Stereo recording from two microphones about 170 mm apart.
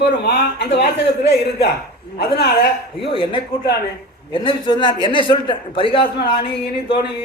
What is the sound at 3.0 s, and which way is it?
A man's voice, 30° left (ahead or behind).